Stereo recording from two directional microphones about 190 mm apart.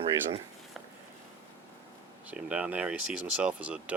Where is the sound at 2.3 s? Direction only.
5° right (ahead or behind).